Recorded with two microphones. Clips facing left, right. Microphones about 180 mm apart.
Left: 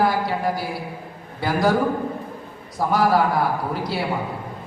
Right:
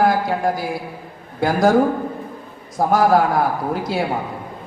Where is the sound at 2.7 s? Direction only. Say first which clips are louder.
Right 4 dB; 45° right (ahead or behind).